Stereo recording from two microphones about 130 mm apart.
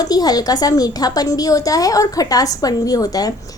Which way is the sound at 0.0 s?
30° left (ahead or behind).